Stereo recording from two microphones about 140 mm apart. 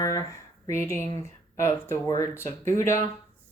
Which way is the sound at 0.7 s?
20° left (ahead or behind).